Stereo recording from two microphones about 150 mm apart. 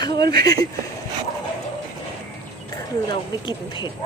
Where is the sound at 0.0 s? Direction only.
30° left (ahead or behind).